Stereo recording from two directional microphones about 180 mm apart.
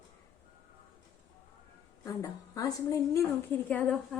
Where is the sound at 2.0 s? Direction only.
20° left (ahead or behind).